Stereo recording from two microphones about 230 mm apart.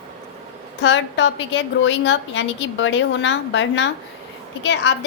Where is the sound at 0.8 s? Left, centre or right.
Left.